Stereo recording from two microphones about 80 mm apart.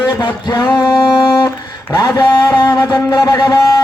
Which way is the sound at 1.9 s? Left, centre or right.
Left.